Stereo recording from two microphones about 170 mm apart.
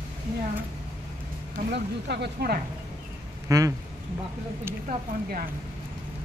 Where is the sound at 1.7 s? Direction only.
80° right.